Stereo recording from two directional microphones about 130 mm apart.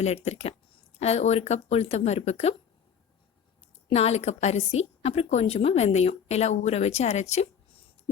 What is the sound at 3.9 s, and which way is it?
Speech, 55° left (ahead or behind).